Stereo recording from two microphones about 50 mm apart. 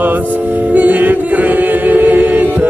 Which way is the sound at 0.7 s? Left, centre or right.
Right.